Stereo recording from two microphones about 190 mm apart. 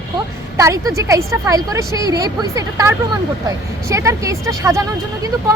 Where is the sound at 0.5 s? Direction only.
15° right (ahead or behind).